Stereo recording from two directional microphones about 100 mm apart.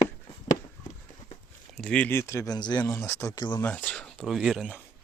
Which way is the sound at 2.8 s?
25° left (ahead or behind).